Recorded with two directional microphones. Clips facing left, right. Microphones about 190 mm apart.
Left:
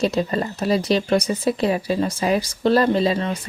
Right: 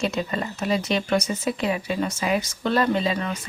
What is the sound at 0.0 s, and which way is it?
Speech, 35° left (ahead or behind).